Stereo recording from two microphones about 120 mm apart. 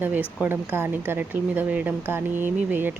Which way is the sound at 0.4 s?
15° right (ahead or behind).